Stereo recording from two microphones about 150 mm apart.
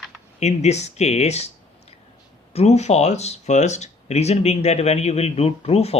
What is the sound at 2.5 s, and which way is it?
Speech, 45° left (ahead or behind).